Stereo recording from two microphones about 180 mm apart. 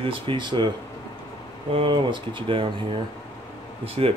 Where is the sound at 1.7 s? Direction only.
30° right (ahead or behind).